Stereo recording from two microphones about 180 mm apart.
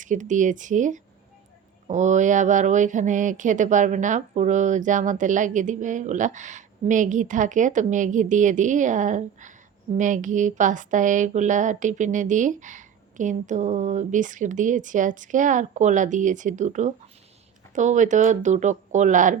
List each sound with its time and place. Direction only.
0.0 s speech: 45° right (ahead or behind)